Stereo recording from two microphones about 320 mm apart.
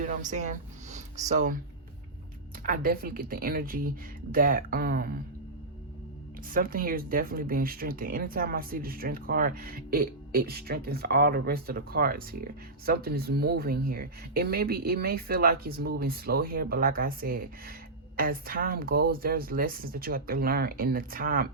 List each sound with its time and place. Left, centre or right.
0.0 s a sound: right
1.3 s speech: right
2.6 s speech: right
6.5 s speech: right